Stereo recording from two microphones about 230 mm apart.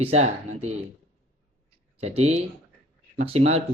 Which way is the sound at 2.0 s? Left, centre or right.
Right.